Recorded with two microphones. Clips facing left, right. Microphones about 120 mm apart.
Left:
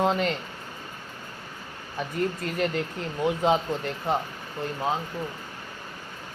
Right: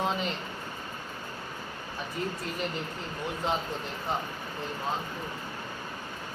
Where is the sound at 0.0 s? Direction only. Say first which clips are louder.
Left 6 dB; 60° left (ahead or behind).